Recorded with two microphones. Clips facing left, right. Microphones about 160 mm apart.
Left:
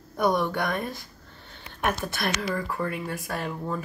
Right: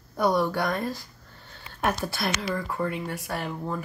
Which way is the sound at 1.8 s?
5° right (ahead or behind).